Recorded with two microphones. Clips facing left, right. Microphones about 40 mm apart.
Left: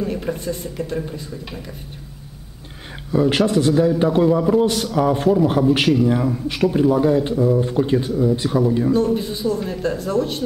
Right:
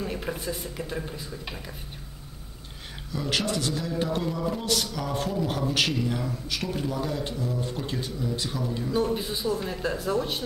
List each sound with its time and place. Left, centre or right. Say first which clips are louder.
0.0 s speech: left 7 dB; centre
3.1 s speech: left 11 dB; left
8.9 s speech: left 7 dB; centre